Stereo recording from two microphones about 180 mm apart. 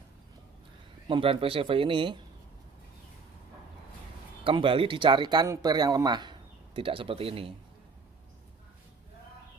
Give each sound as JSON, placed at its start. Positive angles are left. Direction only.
{"t": 1.0, "sound": "speech", "side_deg": -30}
{"t": 4.5, "sound": "speech", "side_deg": -30}